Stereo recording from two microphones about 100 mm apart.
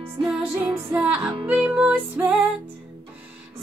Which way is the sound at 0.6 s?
15° right (ahead or behind).